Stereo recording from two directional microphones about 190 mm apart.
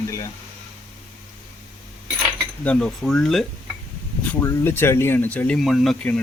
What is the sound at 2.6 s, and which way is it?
Speech, 5° left (ahead or behind).